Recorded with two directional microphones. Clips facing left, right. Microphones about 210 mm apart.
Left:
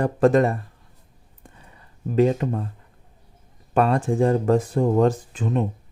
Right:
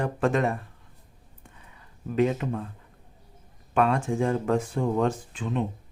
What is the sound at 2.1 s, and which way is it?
Speech, 35° left (ahead or behind).